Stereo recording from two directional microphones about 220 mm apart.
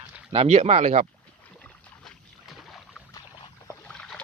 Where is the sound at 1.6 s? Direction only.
5° left (ahead or behind).